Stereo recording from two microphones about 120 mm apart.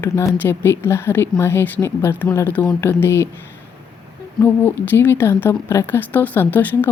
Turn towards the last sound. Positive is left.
turn(degrees=15)  # may be behind; listen again after turning